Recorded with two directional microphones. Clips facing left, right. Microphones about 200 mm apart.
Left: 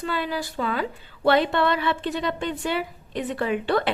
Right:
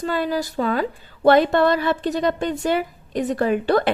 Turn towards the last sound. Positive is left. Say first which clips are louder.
# right 5 dB
turn(degrees=-40)  # may be behind; listen again after turning